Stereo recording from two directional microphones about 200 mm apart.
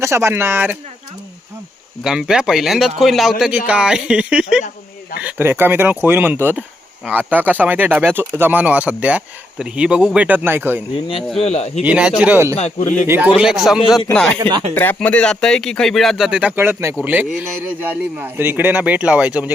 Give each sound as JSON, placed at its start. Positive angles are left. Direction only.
{"t": 0.0, "sound": "speech", "side_deg": -15}
{"t": 2.0, "sound": "a man's voice", "side_deg": -5}
{"t": 11.3, "sound": "speech", "side_deg": 30}
{"t": 11.8, "sound": "a man's voice", "side_deg": -5}
{"t": 12.5, "sound": "speech", "side_deg": 35}
{"t": 13.1, "sound": "a man's voice", "side_deg": -10}
{"t": 14.3, "sound": "speech", "side_deg": -25}
{"t": 14.8, "sound": "speech", "side_deg": 10}